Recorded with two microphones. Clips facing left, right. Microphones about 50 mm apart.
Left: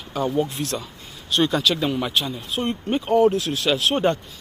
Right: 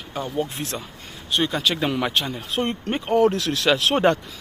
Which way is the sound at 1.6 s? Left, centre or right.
Right.